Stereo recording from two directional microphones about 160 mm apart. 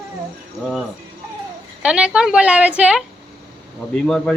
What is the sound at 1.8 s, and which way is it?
A woman's voice, 5° right (ahead or behind).